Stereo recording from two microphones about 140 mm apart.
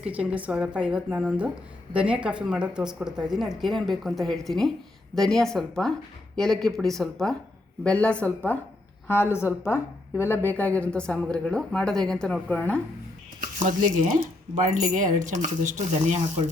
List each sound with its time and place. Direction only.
0.0 s a woman's voice: 10° right (ahead or behind); by 12.8 s 10° left (ahead or behind)
13.7 s speech: 65° right (ahead or behind)